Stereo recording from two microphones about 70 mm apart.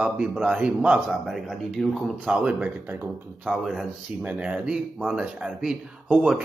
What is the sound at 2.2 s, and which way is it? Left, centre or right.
Speech, centre.